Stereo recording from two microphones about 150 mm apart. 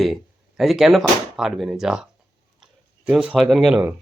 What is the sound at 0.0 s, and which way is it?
Speech, centre (ahead or behind).